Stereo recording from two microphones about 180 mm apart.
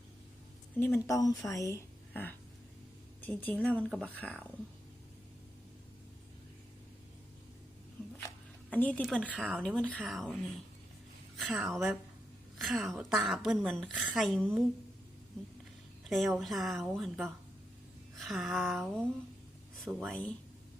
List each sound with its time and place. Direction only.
0.8 s a woman's voice: 15° left (ahead or behind)
8.7 s a woman's voice: 5° left (ahead or behind)
16.0 s a woman's voice: centre (ahead or behind)